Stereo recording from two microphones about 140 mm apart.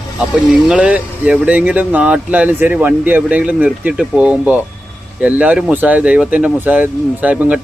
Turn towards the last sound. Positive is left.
turn(degrees=-10)  # may be behind; listen again after turning